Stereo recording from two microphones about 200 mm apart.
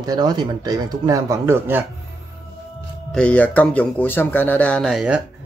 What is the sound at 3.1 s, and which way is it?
Speech, 5° left (ahead or behind).